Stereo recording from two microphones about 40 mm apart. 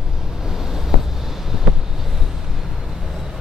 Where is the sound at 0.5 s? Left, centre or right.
Centre.